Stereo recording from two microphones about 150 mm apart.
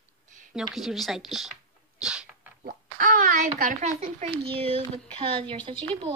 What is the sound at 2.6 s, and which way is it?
Speech, 65° right (ahead or behind).